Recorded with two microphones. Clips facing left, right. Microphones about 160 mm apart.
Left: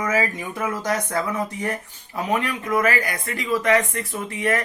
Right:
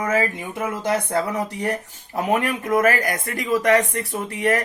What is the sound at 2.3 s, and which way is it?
Speech, 50° right (ahead or behind).